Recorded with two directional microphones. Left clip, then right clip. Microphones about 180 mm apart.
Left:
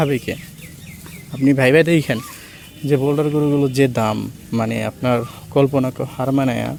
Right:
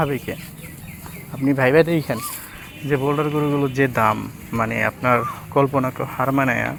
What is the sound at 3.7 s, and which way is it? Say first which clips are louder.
Speech: even; 85° left.